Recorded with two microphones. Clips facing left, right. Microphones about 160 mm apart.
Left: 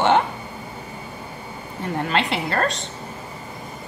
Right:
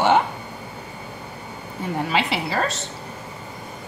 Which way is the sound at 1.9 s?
5° right (ahead or behind).